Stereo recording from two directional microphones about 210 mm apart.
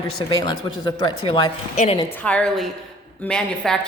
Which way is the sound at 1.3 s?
30° left (ahead or behind).